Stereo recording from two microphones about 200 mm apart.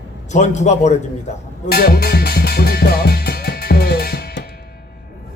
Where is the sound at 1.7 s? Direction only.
50° left (ahead or behind).